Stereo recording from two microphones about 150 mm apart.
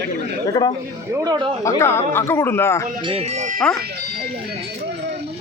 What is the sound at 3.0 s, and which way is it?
Speech, 40° right (ahead or behind).